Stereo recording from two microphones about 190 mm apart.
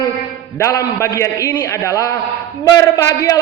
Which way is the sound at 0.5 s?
15° left (ahead or behind).